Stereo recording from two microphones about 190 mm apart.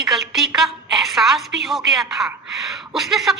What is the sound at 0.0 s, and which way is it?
A woman's voice, centre (ahead or behind).